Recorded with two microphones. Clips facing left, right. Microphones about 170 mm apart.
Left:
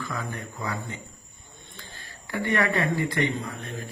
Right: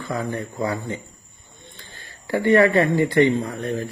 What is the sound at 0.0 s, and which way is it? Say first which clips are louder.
Speech: right 7 dB; 35° right (ahead or behind).